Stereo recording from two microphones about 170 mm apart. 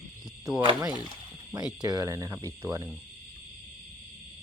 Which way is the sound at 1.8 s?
20° right (ahead or behind).